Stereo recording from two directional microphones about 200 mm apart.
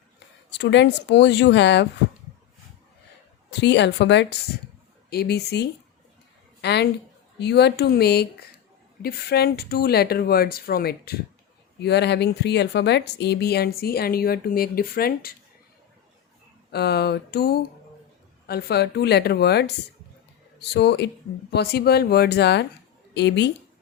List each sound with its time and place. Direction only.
0.5 s speech: 60° left (ahead or behind)
3.5 s a woman's voice: 60° left (ahead or behind)
16.7 s speech: 55° left (ahead or behind)